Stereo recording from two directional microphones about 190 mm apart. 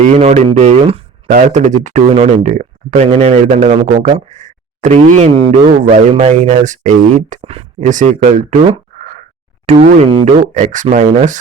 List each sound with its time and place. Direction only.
0.1 s speech: 35° right (ahead or behind)